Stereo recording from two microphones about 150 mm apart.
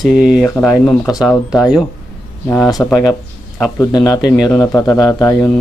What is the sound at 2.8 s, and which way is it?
Speech, 10° left (ahead or behind).